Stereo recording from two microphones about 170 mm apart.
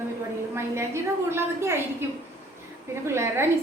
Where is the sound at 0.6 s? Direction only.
15° right (ahead or behind).